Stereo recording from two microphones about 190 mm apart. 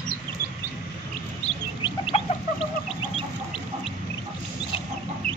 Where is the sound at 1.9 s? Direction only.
25° left (ahead or behind).